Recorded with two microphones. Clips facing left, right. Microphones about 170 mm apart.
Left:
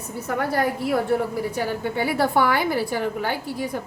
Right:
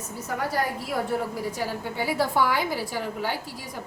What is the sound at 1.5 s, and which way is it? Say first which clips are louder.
A woman's voice: left 5 dB; 60° left (ahead or behind).